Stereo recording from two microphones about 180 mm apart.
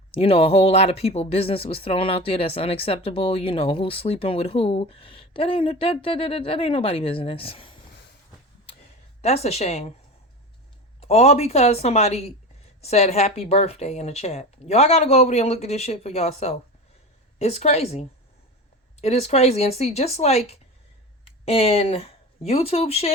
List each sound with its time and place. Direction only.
0.1 s speech: 30° left (ahead or behind)
9.2 s speech: 35° left (ahead or behind)
11.0 s speech: 35° left (ahead or behind)